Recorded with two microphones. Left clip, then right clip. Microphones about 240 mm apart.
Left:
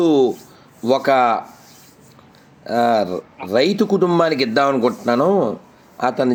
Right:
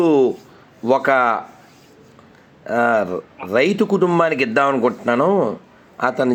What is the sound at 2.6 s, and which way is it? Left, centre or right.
Speech, centre.